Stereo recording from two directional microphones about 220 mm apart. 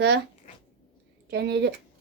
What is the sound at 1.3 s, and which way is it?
Speech, 50° right (ahead or behind).